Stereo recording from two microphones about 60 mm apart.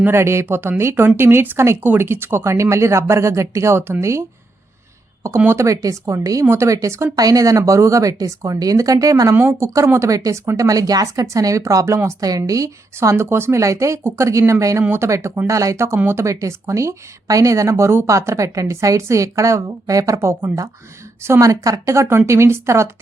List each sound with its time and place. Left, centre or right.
0.1 s speech: right
5.5 s speech: right
6.4 s speech: right
6.7 s speech: right
7.2 s speech: right
9.4 s speech: right
12.2 s speech: right
13.1 s speech: right
13.6 s speech: right
14.8 s speech: right
15.4 s speech: right
20.1 s speech: right
21.4 s speech: right
22.3 s speech: right